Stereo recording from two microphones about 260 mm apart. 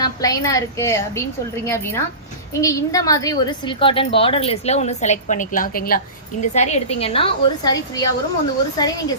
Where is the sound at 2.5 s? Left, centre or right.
Centre.